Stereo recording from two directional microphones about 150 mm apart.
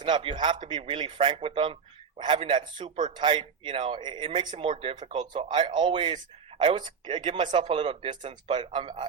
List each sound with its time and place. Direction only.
0.0 s a man's voice: 35° right (ahead or behind)